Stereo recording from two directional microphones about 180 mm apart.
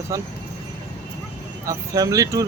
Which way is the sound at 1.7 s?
20° right (ahead or behind).